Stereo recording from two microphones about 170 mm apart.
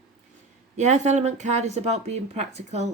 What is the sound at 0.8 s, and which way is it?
Speech, 45° right (ahead or behind).